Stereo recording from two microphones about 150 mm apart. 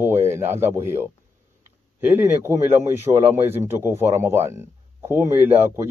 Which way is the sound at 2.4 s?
15° right (ahead or behind).